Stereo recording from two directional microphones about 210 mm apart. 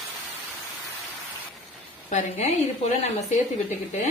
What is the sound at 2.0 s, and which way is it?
Speech, 35° left (ahead or behind).